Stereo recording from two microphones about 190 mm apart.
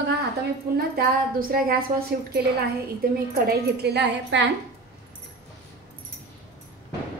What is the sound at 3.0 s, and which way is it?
A woman's voice, 50° right (ahead or behind).